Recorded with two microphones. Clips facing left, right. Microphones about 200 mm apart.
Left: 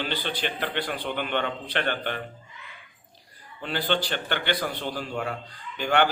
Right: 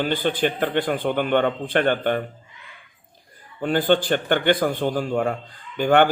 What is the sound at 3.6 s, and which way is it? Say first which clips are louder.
A man's voice: right 8 dB; 50° right (ahead or behind).